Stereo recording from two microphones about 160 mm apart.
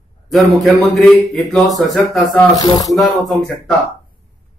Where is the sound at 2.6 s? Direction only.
25° left (ahead or behind).